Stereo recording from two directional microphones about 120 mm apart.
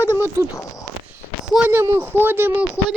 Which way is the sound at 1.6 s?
15° right (ahead or behind).